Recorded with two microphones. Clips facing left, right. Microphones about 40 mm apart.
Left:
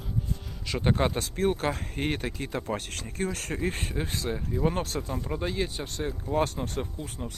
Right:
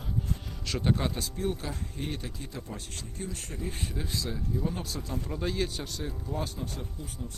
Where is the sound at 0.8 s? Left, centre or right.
Left.